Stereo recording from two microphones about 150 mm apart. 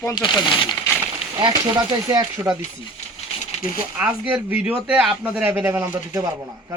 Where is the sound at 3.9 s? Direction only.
10° right (ahead or behind).